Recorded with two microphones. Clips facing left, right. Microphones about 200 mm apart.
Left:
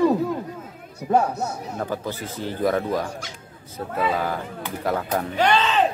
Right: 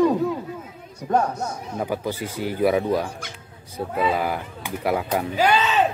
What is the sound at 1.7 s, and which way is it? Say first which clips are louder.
Speech: right 2 dB; 15° right (ahead or behind).